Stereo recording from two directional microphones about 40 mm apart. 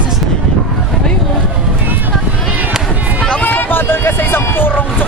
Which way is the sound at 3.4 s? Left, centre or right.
Left.